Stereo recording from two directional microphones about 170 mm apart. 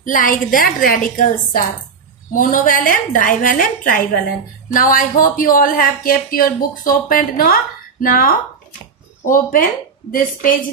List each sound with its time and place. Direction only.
0.0 s a woman's voice: 50° left (ahead or behind)